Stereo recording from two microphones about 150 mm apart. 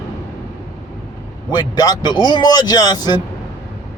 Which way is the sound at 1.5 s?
25° left (ahead or behind).